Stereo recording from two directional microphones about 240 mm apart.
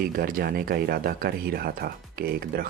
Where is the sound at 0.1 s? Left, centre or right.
Right.